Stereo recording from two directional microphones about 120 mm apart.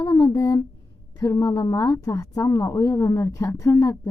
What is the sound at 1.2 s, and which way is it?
A woman's voice, 30° left (ahead or behind).